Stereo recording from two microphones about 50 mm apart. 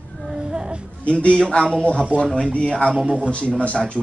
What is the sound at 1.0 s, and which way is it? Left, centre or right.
Speech, left.